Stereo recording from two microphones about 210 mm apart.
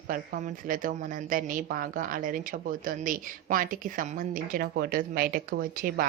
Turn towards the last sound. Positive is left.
turn(degrees=-45)  # may be behind; listen again after turning